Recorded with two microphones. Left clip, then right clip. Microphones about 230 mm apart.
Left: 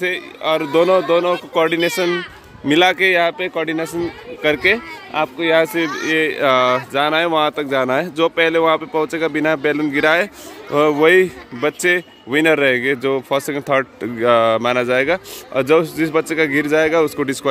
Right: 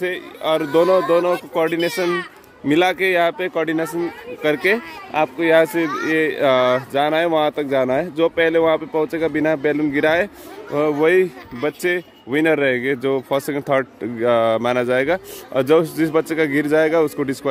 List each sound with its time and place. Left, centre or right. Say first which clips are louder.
0.0 s speech: left 2 dB; centre
10.7 s speech: left 4 dB; centre